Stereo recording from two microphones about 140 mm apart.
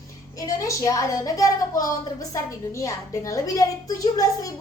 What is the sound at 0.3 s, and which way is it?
A woman's voice, 25° left (ahead or behind).